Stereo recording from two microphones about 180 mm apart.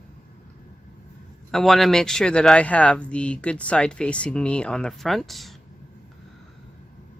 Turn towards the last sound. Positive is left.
turn(degrees=0)  # may be behind; listen again after turning